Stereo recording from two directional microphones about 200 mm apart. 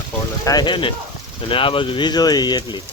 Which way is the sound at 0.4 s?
20° left (ahead or behind).